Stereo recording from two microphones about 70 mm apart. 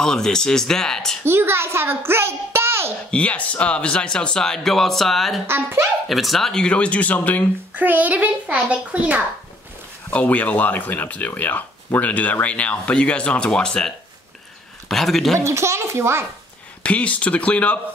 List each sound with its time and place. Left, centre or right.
0.0 s speech: centre
1.2 s a child's voice: right
3.1 s speech: centre
5.5 s a child's voice: right
6.0 s speech: centre; by 7.4 s left
7.7 s a child's voice: right
10.1 s a man's voice: left; by 15.3 s centre
15.3 s a child's voice: right
16.8 s speech: centre